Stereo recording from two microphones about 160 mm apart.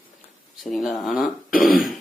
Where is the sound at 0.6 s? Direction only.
Centre (ahead or behind).